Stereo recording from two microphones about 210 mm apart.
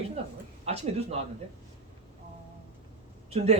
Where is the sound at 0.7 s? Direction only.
30° right (ahead or behind).